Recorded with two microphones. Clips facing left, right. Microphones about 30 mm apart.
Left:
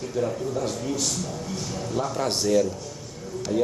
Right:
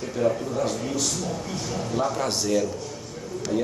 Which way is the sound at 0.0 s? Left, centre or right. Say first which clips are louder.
Right 2 dB; centre.